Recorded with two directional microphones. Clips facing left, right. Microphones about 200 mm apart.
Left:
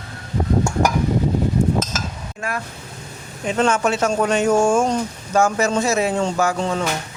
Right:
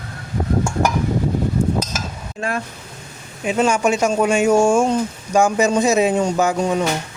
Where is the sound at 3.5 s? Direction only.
10° right (ahead or behind).